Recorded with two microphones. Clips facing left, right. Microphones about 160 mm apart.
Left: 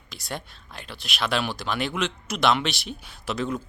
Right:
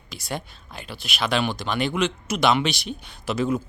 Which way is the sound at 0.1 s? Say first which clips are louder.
Right 3 dB; centre (ahead or behind).